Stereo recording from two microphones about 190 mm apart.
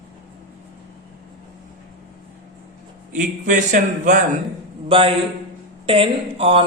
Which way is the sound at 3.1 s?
40° right (ahead or behind).